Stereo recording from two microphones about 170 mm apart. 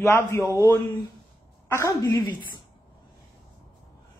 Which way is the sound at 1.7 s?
20° left (ahead or behind).